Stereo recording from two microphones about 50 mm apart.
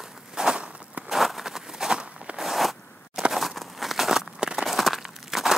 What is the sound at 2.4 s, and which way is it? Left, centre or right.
Zipper, centre.